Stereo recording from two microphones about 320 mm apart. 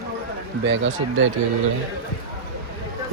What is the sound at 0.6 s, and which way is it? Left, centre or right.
Speech, right.